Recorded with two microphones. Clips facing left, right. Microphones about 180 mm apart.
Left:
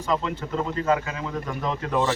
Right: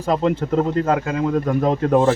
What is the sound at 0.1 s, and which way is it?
Speech, 45° right (ahead or behind).